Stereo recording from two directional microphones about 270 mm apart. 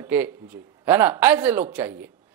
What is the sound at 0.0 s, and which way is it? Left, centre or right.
A man's voice, centre.